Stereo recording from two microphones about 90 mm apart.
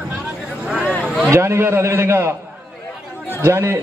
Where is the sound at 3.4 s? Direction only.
30° right (ahead or behind).